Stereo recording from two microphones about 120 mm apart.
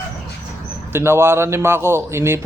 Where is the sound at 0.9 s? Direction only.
20° right (ahead or behind).